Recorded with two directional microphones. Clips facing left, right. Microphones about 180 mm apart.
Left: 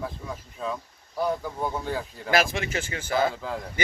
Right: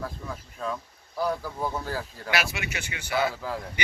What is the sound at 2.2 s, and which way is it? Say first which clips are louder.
Speech: left 6 dB; 35° left (ahead or behind).